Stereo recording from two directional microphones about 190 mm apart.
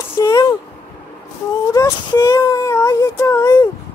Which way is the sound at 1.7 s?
20° left (ahead or behind).